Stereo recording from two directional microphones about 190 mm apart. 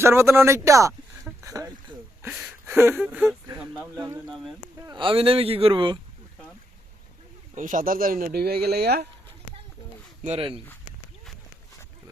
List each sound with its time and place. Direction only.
0.0 s speech: 15° right (ahead or behind)
7.5 s speech: 45° right (ahead or behind)
10.2 s speech: 30° right (ahead or behind)